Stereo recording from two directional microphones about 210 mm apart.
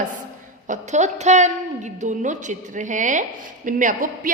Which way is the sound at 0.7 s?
35° right (ahead or behind).